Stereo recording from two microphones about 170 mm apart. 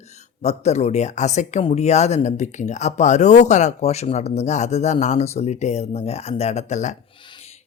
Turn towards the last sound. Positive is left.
turn(degrees=45)  # may be behind; listen again after turning